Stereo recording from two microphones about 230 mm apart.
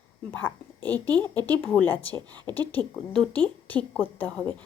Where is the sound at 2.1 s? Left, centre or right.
Centre.